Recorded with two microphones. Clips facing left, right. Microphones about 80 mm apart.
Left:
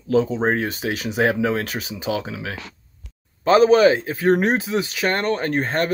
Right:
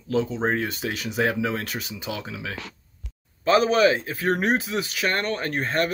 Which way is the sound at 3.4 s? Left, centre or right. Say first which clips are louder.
Left 5 dB; left.